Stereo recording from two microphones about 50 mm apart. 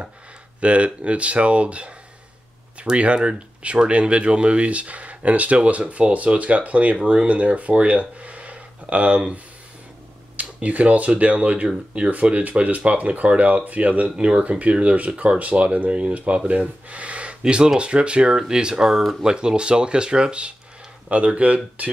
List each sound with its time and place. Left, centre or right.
0.6 s speech: right
14.1 s speech: centre
14.4 s speech: right; by 19.3 s centre
19.3 s speech: centre